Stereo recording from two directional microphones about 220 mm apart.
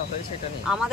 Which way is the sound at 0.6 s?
5° right (ahead or behind).